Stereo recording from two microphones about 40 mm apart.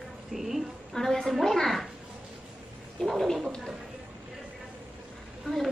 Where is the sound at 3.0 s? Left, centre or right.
Centre.